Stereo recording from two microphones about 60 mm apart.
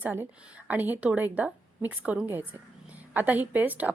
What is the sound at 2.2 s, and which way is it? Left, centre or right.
Speech, right.